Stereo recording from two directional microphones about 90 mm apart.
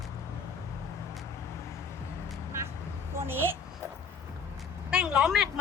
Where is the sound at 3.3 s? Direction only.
25° right (ahead or behind).